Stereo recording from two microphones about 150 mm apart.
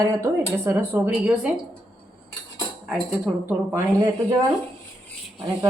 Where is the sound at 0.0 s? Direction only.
20° right (ahead or behind).